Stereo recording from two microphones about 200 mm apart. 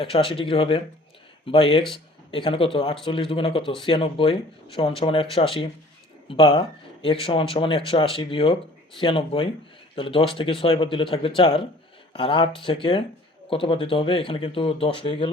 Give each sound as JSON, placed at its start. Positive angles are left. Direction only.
{"t": 0.0, "sound": "speech", "side_deg": 25}